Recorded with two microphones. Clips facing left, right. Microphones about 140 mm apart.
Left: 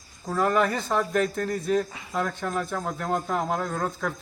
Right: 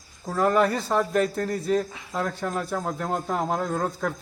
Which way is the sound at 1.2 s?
35° right (ahead or behind).